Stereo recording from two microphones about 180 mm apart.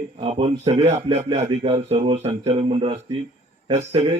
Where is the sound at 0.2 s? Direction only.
35° right (ahead or behind).